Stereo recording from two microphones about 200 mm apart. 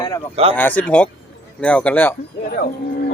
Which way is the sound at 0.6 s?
10° left (ahead or behind).